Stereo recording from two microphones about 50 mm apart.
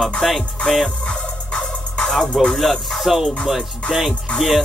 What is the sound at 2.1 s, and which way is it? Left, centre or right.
Speech, centre.